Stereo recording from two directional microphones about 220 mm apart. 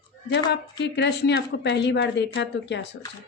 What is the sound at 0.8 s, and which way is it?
A woman's voice, 50° left (ahead or behind).